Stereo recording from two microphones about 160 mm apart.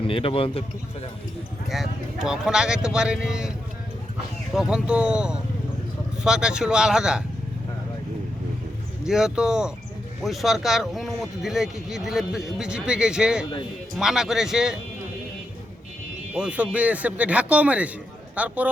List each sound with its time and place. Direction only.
0.1 s speech: 35° left (ahead or behind)
1.7 s speech: centre (ahead or behind)
4.5 s speech: 5° right (ahead or behind)
9.0 s speech: 5° right (ahead or behind)
16.3 s speech: 5° right (ahead or behind)